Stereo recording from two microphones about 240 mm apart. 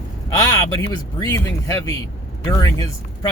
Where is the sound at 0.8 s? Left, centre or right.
Centre.